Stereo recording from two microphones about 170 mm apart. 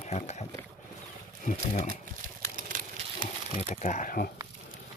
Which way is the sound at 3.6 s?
50° left (ahead or behind).